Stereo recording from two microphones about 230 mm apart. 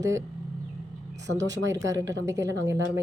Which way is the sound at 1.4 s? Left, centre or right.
Right.